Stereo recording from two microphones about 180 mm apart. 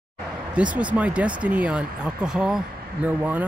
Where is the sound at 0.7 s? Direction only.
5° right (ahead or behind).